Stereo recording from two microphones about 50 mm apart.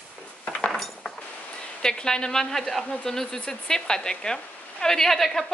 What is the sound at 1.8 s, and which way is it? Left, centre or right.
A woman's voice, centre.